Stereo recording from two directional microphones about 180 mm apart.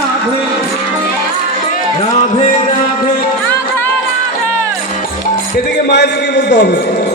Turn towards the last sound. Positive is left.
turn(degrees=70)  # may be behind; listen again after turning